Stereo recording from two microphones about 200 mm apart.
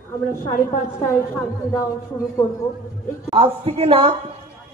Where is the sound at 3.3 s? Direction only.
30° right (ahead or behind).